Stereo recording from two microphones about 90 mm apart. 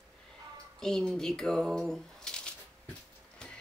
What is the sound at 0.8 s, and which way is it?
Speech, 5° left (ahead or behind).